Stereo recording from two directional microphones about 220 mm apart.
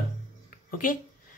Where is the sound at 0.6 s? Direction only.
40° left (ahead or behind).